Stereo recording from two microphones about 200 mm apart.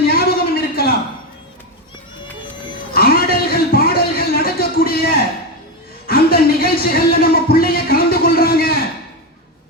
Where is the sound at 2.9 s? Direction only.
50° left (ahead or behind).